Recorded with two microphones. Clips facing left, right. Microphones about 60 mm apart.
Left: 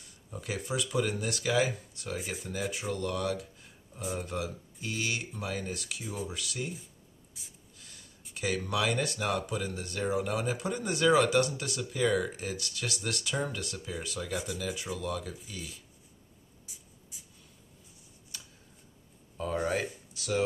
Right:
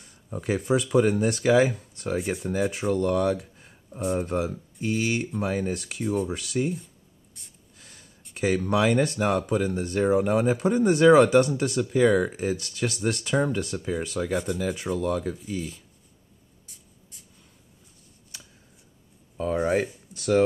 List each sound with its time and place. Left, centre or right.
0.0 s speech: right
2.1 s speech: centre
2.9 s speech: right
5.7 s speech: right
6.2 s speech: right
7.4 s a sound: centre
8.6 s speech: right
14.3 s speech: centre
14.6 s speech: right
16.6 s writing: centre
19.3 s a sound: right
20.2 s speech: right